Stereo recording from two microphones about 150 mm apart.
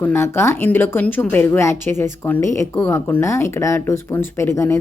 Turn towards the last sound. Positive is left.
turn(degrees=20)  # may be behind; listen again after turning